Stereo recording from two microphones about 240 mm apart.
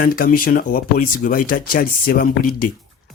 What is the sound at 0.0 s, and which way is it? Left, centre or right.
Speech, left.